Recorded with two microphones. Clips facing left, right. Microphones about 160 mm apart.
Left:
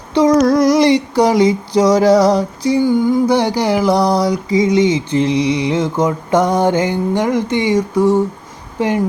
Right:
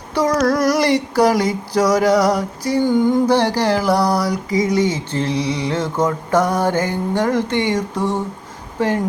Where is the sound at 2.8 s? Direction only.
10° left (ahead or behind).